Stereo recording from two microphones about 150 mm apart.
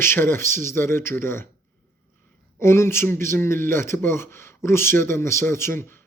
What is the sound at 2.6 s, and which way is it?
Speech, 15° left (ahead or behind).